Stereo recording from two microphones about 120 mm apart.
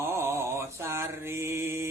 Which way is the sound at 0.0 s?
20° right (ahead or behind).